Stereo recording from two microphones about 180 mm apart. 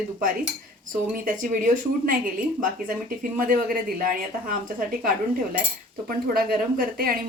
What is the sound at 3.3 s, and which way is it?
A woman's voice, 50° right (ahead or behind).